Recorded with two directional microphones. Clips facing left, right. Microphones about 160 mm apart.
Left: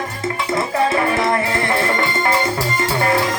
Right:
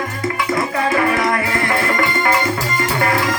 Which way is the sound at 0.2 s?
25° left (ahead or behind).